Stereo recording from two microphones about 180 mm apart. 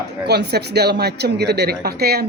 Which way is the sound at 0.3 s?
65° right (ahead or behind).